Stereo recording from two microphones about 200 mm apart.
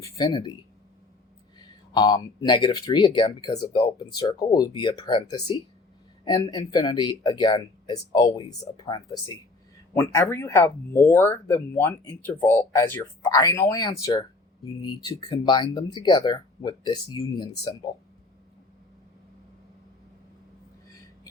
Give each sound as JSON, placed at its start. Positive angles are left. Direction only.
{"t": 0.0, "sound": "speech", "side_deg": 20}
{"t": 1.9, "sound": "speech", "side_deg": 20}